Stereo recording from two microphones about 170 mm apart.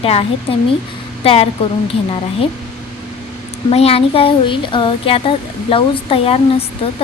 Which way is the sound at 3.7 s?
35° left (ahead or behind).